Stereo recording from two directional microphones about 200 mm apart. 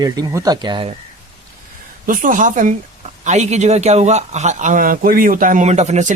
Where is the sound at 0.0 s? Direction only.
15° right (ahead or behind).